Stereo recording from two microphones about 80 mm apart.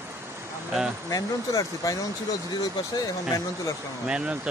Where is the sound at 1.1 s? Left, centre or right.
Left.